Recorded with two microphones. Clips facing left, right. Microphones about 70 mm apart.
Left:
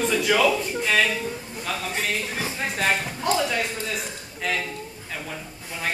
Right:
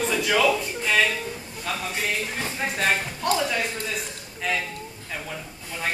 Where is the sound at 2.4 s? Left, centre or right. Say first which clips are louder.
Even; centre.